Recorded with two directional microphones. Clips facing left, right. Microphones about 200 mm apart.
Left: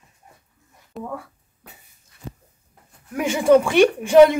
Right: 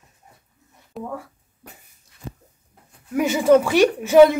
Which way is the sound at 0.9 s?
5° right (ahead or behind).